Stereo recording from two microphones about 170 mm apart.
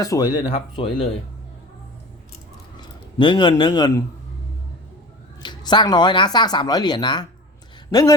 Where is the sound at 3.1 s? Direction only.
25° left (ahead or behind).